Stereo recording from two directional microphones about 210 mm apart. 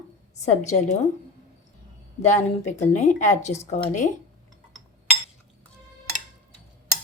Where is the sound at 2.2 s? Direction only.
35° left (ahead or behind).